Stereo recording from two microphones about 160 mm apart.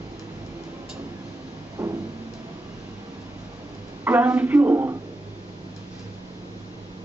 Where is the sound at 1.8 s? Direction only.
20° right (ahead or behind).